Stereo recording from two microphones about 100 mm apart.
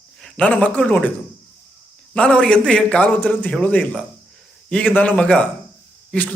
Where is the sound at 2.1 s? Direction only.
10° left (ahead or behind).